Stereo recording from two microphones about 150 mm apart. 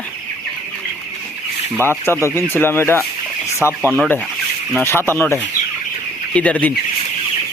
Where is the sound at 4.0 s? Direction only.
10° left (ahead or behind).